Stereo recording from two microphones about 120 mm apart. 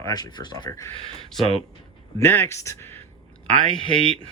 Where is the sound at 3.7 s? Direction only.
50° right (ahead or behind).